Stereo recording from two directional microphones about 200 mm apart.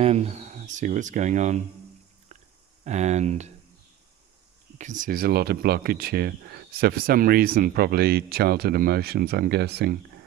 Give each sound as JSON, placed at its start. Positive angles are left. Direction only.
{"t": 0.0, "sound": "speech", "side_deg": -35}
{"t": 2.8, "sound": "speech", "side_deg": -35}
{"t": 4.7, "sound": "speech", "side_deg": -40}